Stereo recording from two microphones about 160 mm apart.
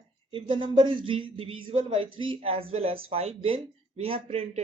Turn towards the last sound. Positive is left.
turn(degrees=-40)  # may be behind; listen again after turning